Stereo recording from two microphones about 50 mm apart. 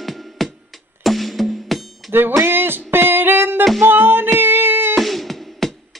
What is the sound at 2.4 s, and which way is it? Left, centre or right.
Music, right.